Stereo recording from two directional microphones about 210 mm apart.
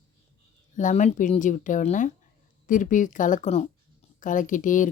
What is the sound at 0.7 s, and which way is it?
Speech, 35° left (ahead or behind).